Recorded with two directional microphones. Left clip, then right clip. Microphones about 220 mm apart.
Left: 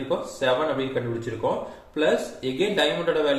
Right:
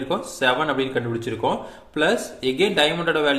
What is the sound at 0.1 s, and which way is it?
A man's voice, 45° right (ahead or behind).